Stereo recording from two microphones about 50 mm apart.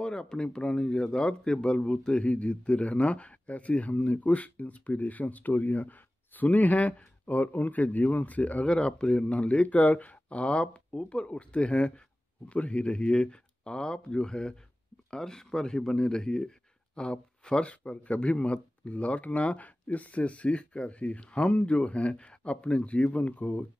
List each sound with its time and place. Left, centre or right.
0.0 s a man's voice: centre
8.7 s speech: centre; by 23.6 s left